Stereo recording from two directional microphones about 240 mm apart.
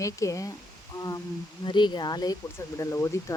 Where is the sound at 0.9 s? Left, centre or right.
Centre.